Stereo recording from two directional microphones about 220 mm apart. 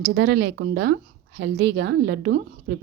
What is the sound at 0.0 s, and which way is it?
Speech, 50° right (ahead or behind).